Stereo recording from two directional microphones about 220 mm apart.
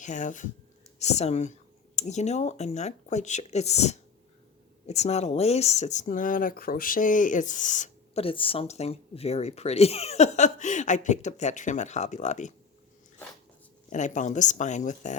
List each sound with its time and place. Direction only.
0.0 s speech: 35° left (ahead or behind)
13.9 s speech: 35° left (ahead or behind)